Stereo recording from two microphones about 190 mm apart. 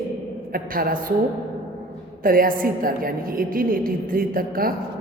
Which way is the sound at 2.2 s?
50° right (ahead or behind).